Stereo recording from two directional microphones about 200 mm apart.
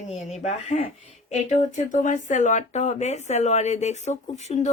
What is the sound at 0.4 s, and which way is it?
A woman's voice, 35° left (ahead or behind).